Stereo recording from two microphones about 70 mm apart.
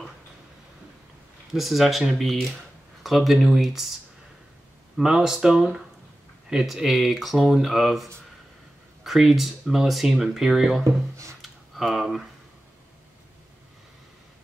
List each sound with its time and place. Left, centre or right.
1.5 s speech: centre
4.9 s speech: centre
10.8 s speech: right
11.4 s typing: centre